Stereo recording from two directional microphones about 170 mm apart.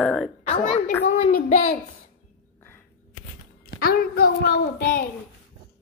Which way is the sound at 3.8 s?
60° left (ahead or behind).